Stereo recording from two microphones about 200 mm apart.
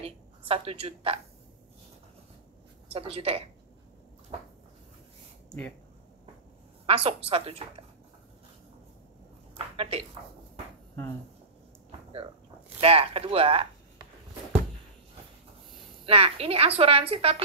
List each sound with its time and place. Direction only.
0.0 s a woman's voice: 30° right (ahead or behind)
2.9 s a woman's voice: 30° right (ahead or behind)
6.9 s a woman's voice: 30° right (ahead or behind)
9.8 s speech: 30° right (ahead or behind)
12.8 s a woman's voice: 30° right (ahead or behind)
16.1 s a woman's voice: 30° right (ahead or behind)